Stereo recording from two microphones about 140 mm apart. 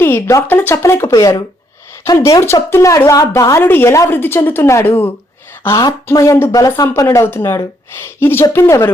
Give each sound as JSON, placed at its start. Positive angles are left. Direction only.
{"t": 0.0, "sound": "speech", "side_deg": 20}